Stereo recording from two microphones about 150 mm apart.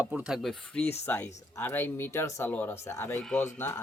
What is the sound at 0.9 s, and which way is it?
Speech, 15° left (ahead or behind).